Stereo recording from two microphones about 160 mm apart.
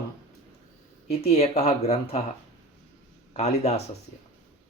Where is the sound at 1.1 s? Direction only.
40° left (ahead or behind).